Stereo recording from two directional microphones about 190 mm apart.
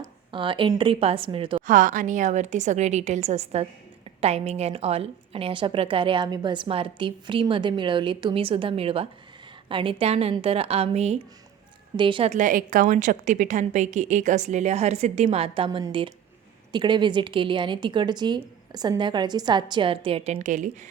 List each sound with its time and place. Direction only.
0.3 s a woman's voice: 25° right (ahead or behind)
1.6 s a woman's voice: 45° right (ahead or behind)